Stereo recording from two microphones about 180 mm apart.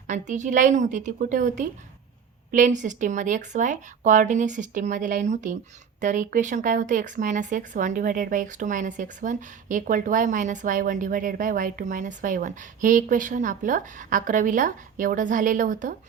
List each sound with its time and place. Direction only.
0.1 s speech: 40° right (ahead or behind)